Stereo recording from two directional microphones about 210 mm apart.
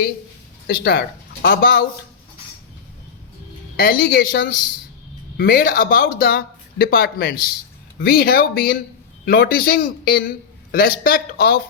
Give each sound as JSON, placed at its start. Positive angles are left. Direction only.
{"t": 0.7, "sound": "speech", "side_deg": 50}
{"t": 3.8, "sound": "speech", "side_deg": 45}